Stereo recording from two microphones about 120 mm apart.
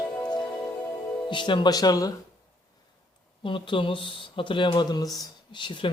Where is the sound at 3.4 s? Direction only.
45° left (ahead or behind).